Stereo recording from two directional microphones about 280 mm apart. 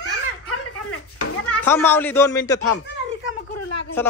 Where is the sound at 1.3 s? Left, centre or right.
Left.